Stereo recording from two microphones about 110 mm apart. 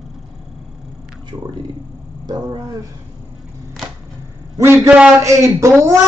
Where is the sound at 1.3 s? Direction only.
35° right (ahead or behind).